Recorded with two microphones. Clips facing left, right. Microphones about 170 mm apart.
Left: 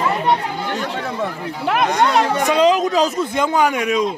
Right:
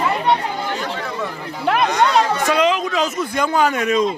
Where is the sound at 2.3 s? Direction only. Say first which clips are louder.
Left 1 dB; 20° left (ahead or behind).